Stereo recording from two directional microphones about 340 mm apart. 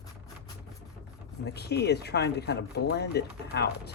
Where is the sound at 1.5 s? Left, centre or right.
Left.